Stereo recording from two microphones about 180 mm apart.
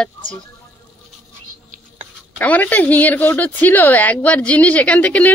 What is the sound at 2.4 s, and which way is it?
A woman's voice, 10° left (ahead or behind).